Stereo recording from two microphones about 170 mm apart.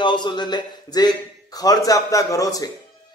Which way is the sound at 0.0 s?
25° left (ahead or behind).